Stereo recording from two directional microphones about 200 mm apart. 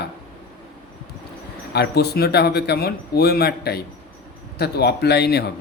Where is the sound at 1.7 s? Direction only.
55° left (ahead or behind).